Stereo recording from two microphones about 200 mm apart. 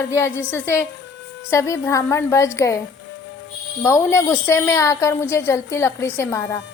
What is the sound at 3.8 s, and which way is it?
A woman's voice, 15° left (ahead or behind).